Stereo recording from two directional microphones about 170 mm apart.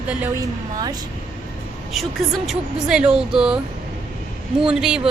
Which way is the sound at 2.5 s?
5° right (ahead or behind).